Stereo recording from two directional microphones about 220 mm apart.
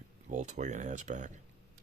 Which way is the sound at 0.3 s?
30° right (ahead or behind).